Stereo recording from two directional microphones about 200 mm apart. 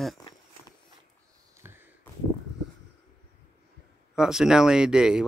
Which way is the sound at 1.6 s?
10° right (ahead or behind).